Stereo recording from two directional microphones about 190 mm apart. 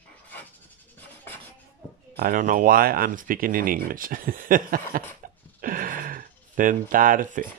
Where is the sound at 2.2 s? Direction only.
45° right (ahead or behind).